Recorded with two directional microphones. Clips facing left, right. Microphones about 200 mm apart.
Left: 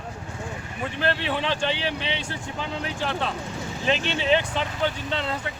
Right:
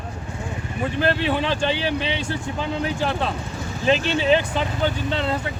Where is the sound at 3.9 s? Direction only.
40° right (ahead or behind).